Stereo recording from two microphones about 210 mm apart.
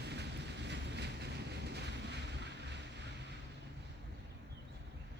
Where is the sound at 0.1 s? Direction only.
55° right (ahead or behind).